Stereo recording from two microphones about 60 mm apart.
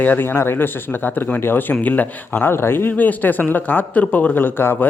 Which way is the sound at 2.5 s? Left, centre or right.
Left.